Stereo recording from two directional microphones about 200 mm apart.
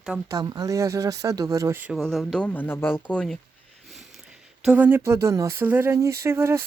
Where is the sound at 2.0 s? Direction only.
Centre (ahead or behind).